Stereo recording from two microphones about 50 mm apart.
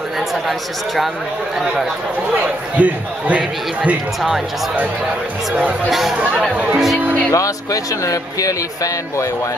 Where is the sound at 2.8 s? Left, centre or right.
Right.